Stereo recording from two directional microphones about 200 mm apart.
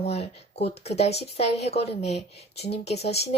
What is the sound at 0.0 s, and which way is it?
A woman's voice, 30° left (ahead or behind).